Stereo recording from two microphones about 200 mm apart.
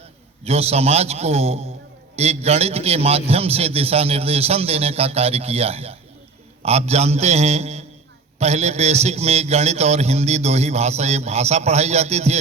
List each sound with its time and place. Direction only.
0.4 s a man's voice: 30° right (ahead or behind)